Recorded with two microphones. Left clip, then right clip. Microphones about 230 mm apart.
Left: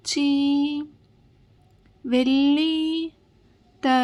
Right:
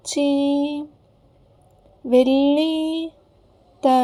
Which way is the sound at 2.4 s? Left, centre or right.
Left.